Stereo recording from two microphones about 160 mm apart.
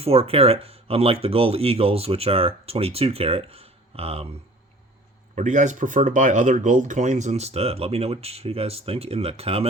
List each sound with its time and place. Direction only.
0.0 s speech: 40° right (ahead or behind)
5.3 s speech: 50° right (ahead or behind)